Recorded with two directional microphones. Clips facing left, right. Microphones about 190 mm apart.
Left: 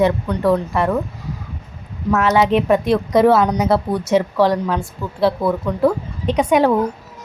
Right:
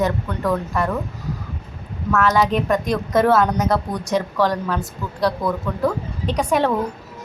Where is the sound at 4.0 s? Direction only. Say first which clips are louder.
Left 5 dB; 5° left (ahead or behind).